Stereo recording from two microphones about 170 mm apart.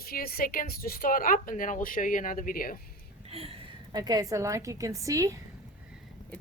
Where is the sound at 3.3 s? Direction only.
35° right (ahead or behind).